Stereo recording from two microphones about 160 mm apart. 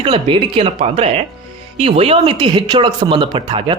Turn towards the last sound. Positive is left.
turn(degrees=-30)  # may be behind; listen again after turning